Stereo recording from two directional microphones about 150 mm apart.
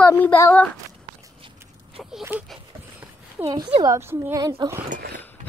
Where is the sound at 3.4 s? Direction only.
30° right (ahead or behind).